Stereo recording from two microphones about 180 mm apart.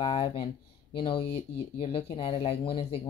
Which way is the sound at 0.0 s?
25° left (ahead or behind).